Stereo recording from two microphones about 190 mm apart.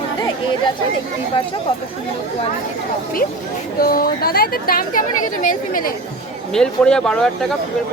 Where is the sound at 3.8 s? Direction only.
50° left (ahead or behind).